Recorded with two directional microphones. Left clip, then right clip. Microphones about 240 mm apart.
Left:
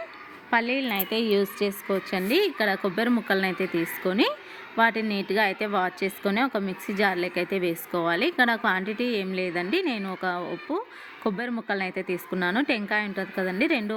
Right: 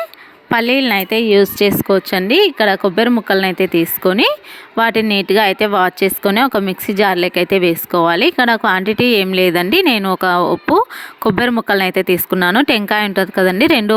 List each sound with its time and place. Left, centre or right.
0.5 s speech: right